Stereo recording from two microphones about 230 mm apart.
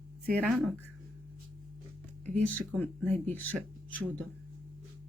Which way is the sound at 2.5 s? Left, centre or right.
Centre.